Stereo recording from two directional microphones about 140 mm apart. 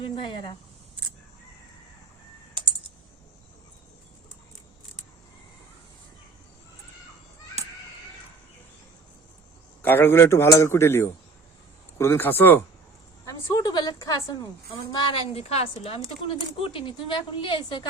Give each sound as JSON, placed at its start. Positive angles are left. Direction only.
{"t": 0.0, "sound": "a woman's voice", "side_deg": 35}
{"t": 9.8, "sound": "a man's voice", "side_deg": 15}
{"t": 13.2, "sound": "a woman's voice", "side_deg": 25}
{"t": 15.1, "sound": "a woman's voice", "side_deg": 45}